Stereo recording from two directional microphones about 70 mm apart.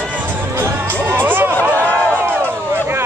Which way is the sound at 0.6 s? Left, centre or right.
Right.